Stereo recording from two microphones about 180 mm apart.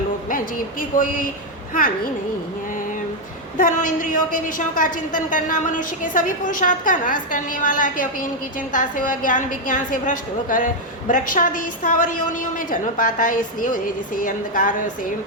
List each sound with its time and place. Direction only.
0.3 s a woman's voice: 50° left (ahead or behind)
3.6 s a woman's voice: 45° left (ahead or behind)